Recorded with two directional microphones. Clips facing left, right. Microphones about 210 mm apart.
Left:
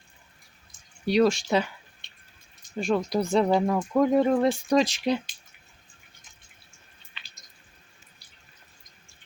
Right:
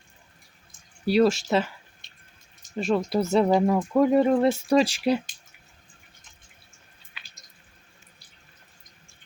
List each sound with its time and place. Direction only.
1.0 s speech: 5° right (ahead or behind)
2.0 s drip: 45° right (ahead or behind)
2.7 s speech: centre (ahead or behind)